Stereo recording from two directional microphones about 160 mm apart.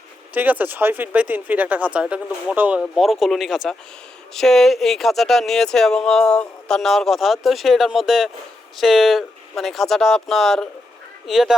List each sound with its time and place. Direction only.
0.3 s speech: 10° right (ahead or behind)